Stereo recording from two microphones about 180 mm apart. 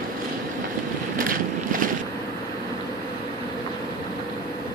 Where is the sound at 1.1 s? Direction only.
50° right (ahead or behind).